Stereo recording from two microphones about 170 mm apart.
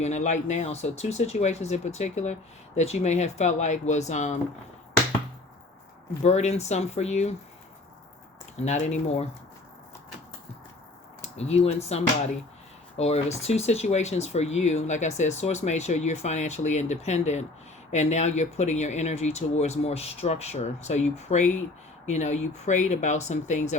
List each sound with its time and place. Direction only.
0.0 s speech: 40° left (ahead or behind)
6.2 s speech: 40° left (ahead or behind)
8.5 s speech: 40° left (ahead or behind)
11.2 s speech: 40° left (ahead or behind)